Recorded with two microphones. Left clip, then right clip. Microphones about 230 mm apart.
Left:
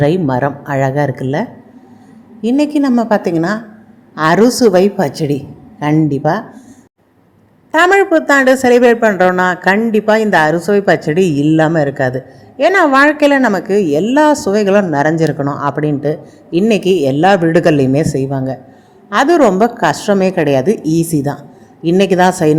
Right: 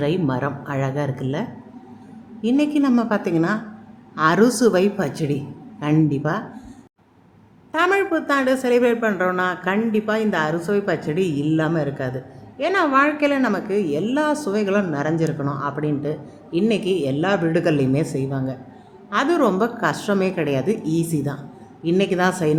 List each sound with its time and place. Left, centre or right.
0.0 s a woman's voice: left
7.7 s a woman's voice: left